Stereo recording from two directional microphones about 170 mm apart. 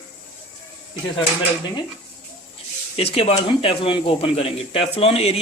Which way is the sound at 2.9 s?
35° left (ahead or behind).